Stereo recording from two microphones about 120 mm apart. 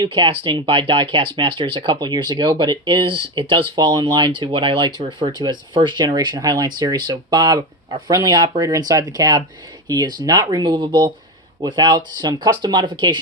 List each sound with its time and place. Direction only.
0.0 s speech: 40° right (ahead or behind)